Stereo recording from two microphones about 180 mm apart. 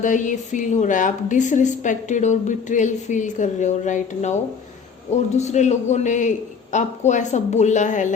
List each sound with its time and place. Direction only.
0.0 s a woman's voice: 45° left (ahead or behind)
5.4 s a man's voice: 40° left (ahead or behind)